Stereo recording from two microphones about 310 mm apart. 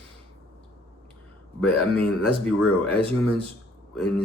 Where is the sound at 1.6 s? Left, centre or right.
Centre.